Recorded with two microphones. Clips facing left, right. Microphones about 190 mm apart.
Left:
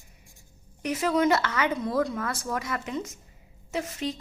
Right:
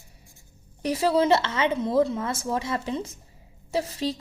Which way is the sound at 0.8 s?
35° right (ahead or behind).